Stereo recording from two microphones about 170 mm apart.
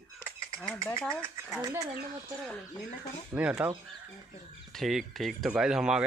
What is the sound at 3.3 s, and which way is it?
Speech, 10° right (ahead or behind).